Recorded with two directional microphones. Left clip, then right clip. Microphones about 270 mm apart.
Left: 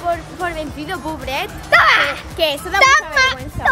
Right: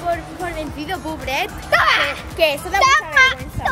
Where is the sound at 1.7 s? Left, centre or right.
Left.